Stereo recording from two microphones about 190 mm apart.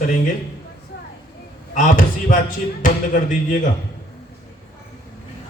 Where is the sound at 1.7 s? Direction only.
45° left (ahead or behind).